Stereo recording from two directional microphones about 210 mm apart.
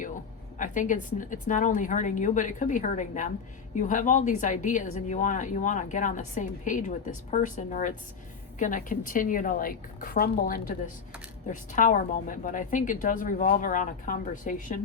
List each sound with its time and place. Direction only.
0.6 s speech: 40° left (ahead or behind)